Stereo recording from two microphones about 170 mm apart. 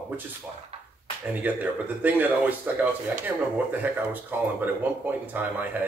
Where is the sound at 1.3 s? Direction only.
10° right (ahead or behind).